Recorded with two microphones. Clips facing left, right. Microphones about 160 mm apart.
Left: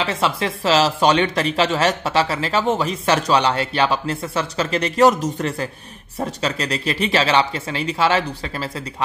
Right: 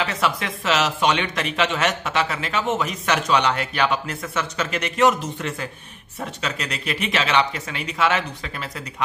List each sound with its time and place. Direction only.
0.0 s speech: 30° left (ahead or behind)